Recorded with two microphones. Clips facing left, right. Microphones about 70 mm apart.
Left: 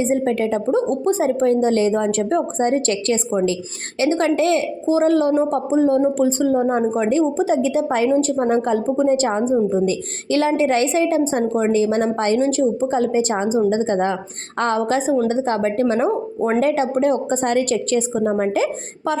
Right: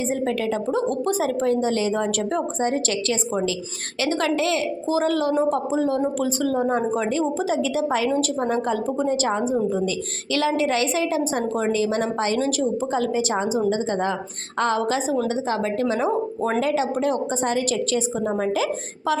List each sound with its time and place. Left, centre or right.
0.0 s a woman's voice: left
4.0 s a woman's voice: left
17.3 s a woman's voice: left